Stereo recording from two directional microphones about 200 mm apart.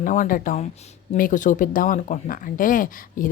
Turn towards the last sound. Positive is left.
turn(degrees=45)  # may be behind; listen again after turning